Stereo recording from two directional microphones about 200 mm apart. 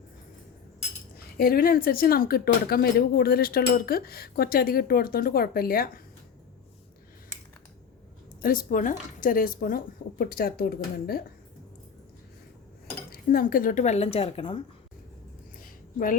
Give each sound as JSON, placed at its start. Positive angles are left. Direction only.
{"t": 1.4, "sound": "speech", "side_deg": 45}
{"t": 8.4, "sound": "speech", "side_deg": 45}
{"t": 13.1, "sound": "speech", "side_deg": 45}